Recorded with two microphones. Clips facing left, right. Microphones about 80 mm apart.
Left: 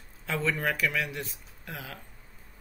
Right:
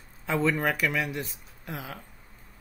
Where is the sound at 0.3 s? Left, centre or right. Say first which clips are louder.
Right 4 dB; centre.